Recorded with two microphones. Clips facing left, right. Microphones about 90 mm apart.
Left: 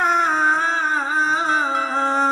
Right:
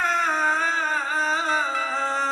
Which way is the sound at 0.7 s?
20° left (ahead or behind).